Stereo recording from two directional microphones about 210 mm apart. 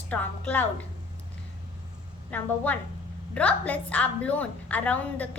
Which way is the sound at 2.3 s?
5° left (ahead or behind).